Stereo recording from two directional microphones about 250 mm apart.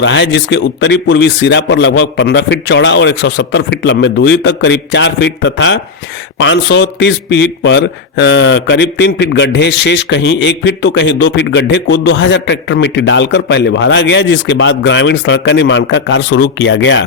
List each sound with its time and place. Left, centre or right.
0.0 s a man's voice: left